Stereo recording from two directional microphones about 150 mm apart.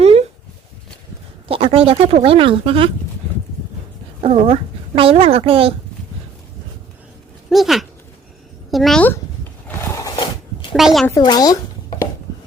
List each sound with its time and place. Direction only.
0.0 s a sound: 45° right (ahead or behind)
1.5 s a woman's voice: 40° right (ahead or behind)
4.2 s a woman's voice: 45° right (ahead or behind)
7.5 s speech: centre (ahead or behind)
9.6 s a sound: 20° left (ahead or behind)
10.8 s speech: centre (ahead or behind)
11.1 s speech: 25° left (ahead or behind)